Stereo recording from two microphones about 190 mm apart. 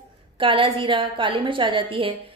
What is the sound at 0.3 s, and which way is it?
A woman's voice, 25° right (ahead or behind).